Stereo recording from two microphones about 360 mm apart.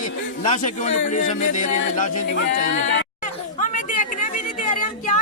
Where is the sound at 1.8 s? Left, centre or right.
Left.